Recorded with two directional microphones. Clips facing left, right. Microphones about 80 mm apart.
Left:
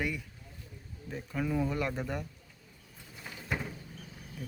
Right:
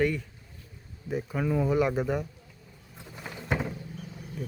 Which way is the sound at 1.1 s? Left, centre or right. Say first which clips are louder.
Right 5 dB; centre.